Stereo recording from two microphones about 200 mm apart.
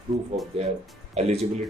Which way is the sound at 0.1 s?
35° right (ahead or behind).